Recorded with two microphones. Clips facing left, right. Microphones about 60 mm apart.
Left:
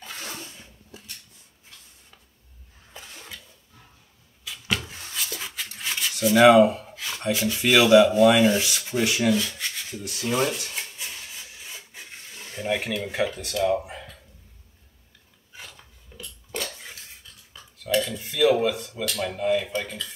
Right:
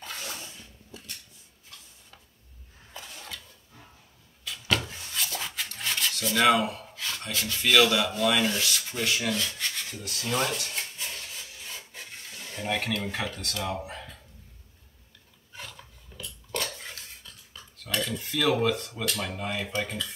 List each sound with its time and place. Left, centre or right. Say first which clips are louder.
2.9 s a sound: even; centre
4.5 s a sound: right 1 dB; centre
9.5 s rub: left 1 dB; centre
12.5 s speech: left 3 dB; centre
16.7 s dog: right 1 dB; centre
17.5 s speech: left 8 dB; centre